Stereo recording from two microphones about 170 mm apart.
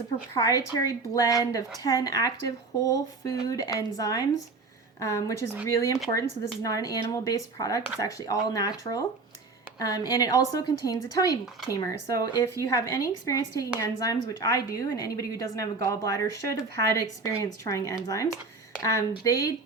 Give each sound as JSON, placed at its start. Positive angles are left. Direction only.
{"t": 0.3, "sound": "a woman's voice", "side_deg": 20}